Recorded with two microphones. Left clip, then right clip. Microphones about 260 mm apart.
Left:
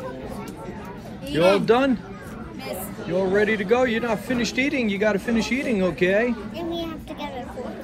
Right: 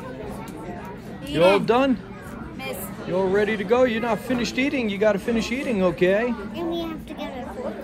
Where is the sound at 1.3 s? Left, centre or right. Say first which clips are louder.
Even; centre.